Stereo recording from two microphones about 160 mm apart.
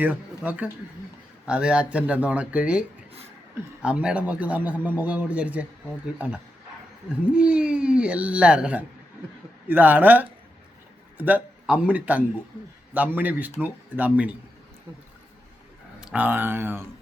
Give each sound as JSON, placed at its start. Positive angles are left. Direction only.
{"t": 0.0, "sound": "a man's voice", "side_deg": -10}
{"t": 3.8, "sound": "a man's voice", "side_deg": -5}
{"t": 16.0, "sound": "speech", "side_deg": -5}